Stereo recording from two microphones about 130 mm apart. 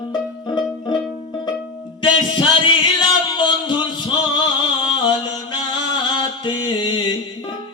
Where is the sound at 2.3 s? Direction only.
40° left (ahead or behind).